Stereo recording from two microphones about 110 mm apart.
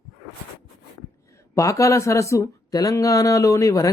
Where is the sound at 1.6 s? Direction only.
30° left (ahead or behind).